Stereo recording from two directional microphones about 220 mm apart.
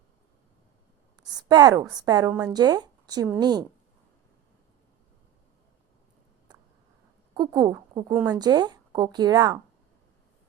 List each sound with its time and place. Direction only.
1.2 s speech: 20° right (ahead or behind)
7.3 s speech: 20° right (ahead or behind)